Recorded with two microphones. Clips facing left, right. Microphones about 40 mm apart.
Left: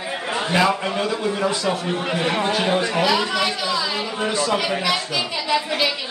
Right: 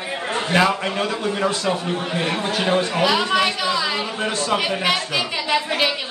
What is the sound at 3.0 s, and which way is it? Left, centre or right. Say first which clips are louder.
A man's voice: right 2 dB; right.